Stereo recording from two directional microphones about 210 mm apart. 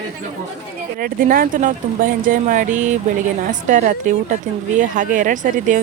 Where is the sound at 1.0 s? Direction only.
45° right (ahead or behind).